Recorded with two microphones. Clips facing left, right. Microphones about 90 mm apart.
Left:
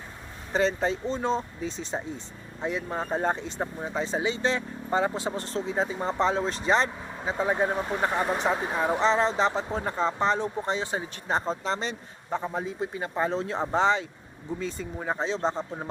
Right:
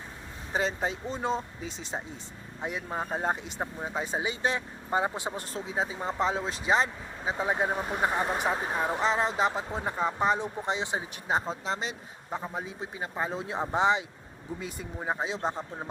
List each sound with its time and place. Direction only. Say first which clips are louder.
0.5 s speech: left 4 dB; 5° right (ahead or behind)